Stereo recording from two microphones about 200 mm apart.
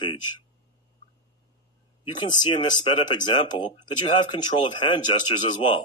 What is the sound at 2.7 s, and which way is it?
Speech, 35° left (ahead or behind).